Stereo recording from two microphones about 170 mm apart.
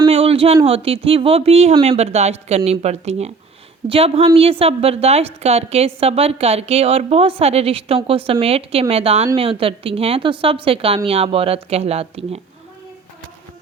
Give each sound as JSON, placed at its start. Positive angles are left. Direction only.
{"t": 0.1, "sound": "a woman's voice", "side_deg": -35}